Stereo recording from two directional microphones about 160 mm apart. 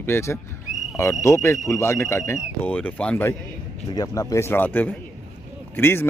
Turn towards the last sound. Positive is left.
turn(degrees=15)  # may be behind; listen again after turning